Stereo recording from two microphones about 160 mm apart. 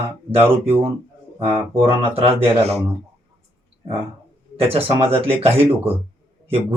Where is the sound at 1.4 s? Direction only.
15° right (ahead or behind).